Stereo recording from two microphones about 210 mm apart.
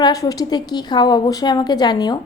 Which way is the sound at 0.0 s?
15° left (ahead or behind).